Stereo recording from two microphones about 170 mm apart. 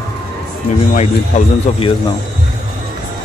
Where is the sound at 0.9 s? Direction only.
40° left (ahead or behind).